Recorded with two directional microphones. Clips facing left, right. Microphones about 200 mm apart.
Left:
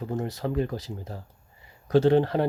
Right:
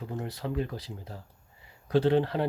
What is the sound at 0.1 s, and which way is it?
Speech, 45° left (ahead or behind).